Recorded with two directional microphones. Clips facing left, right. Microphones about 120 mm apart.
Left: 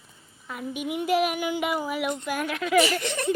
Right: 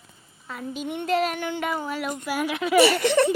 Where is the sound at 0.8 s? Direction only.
5° left (ahead or behind).